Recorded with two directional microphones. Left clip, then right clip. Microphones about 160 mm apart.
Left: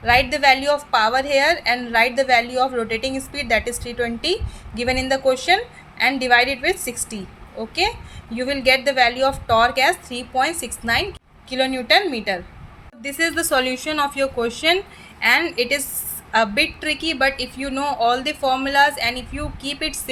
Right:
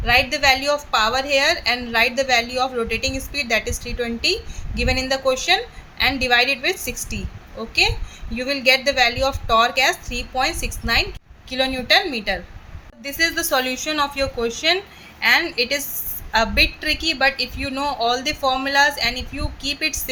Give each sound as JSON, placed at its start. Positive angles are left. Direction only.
{"t": 0.0, "sound": "a woman's voice", "side_deg": 15}